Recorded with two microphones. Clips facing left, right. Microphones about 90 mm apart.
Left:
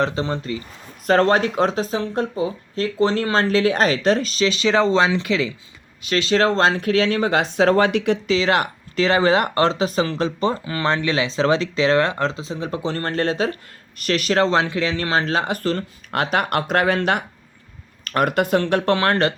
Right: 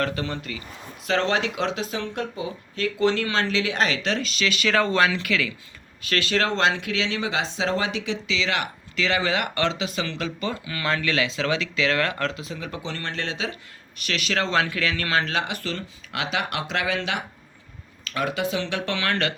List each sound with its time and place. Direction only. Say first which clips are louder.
0.0 s speech: left 5 dB; 25° left (ahead or behind)
1.0 s speech: left 7 dB; 45° left (ahead or behind)